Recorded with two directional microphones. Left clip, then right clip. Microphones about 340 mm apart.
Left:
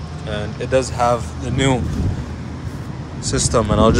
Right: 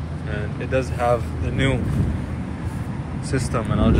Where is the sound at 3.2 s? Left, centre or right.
Centre.